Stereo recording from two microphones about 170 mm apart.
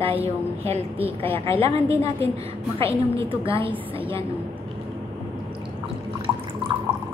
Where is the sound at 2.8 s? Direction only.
30° right (ahead or behind).